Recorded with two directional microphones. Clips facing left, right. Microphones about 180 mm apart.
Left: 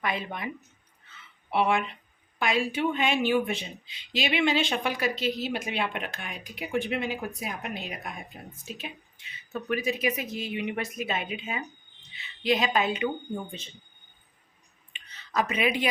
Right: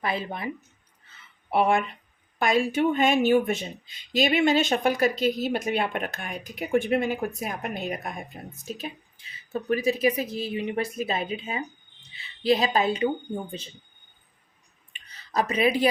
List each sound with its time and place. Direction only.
0.0 s a woman's voice: 35° right (ahead or behind)
1.5 s a woman's voice: 45° right (ahead or behind)
14.9 s a sound: 35° right (ahead or behind)